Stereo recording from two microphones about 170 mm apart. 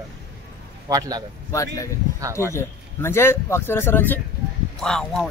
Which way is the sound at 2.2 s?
15° right (ahead or behind).